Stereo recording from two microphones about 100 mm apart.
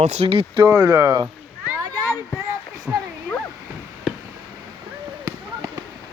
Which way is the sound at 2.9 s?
15° right (ahead or behind).